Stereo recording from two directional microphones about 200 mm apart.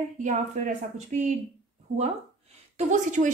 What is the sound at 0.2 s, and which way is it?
A woman's voice, 40° right (ahead or behind).